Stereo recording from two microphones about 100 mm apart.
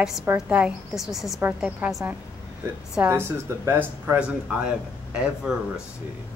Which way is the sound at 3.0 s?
25° right (ahead or behind).